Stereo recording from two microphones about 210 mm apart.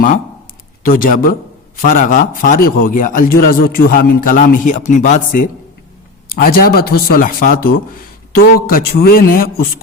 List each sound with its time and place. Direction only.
0.8 s a man's voice: 40° left (ahead or behind)
6.3 s a man's voice: 45° left (ahead or behind)